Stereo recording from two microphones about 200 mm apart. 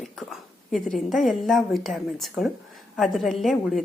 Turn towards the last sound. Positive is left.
turn(degrees=0)  # may be behind; listen again after turning